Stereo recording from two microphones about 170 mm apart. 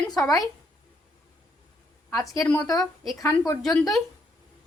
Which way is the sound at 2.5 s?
20° left (ahead or behind).